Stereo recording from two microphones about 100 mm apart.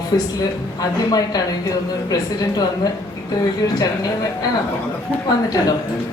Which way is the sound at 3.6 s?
40° left (ahead or behind).